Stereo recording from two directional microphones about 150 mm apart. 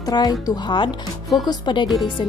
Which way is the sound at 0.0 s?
25° left (ahead or behind).